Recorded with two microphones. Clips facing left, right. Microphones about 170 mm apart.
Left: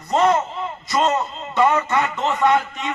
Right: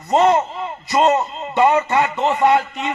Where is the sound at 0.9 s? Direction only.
15° right (ahead or behind).